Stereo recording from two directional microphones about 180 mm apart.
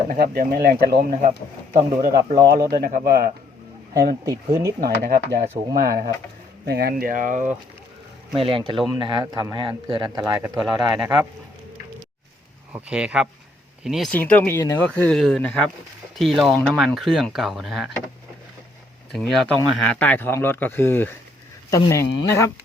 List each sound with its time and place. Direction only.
0.1 s speech: 55° right (ahead or behind)
2.0 s speech: 20° right (ahead or behind)
2.8 s speech: 55° right (ahead or behind)
3.9 s speech: 20° right (ahead or behind)
4.8 s speech: 55° right (ahead or behind)
8.3 s speech: 30° right (ahead or behind)
12.7 s speech: 5° right (ahead or behind)
19.1 s speech: centre (ahead or behind)